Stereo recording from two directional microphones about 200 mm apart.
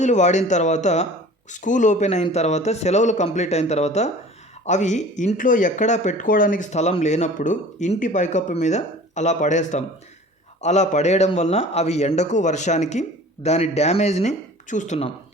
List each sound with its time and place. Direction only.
0.0 s speech: 35° left (ahead or behind)